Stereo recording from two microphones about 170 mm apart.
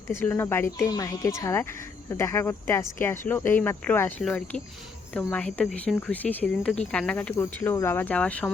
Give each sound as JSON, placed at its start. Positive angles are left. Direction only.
{"t": 0.1, "sound": "speech", "side_deg": 15}
{"t": 4.2, "sound": "speech", "side_deg": 0}